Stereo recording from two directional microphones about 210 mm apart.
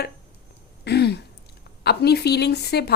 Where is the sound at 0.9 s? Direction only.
50° left (ahead or behind).